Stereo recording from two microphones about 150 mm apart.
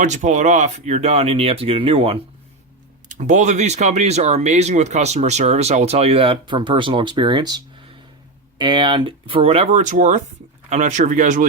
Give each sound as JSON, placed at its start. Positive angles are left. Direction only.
{"t": 0.0, "sound": "speech", "side_deg": -55}
{"t": 3.1, "sound": "speech", "side_deg": -55}